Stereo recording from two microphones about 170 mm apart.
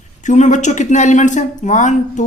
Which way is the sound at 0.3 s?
45° left (ahead or behind).